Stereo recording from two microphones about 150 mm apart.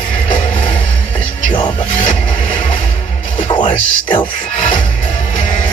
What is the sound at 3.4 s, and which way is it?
Music, 30° left (ahead or behind).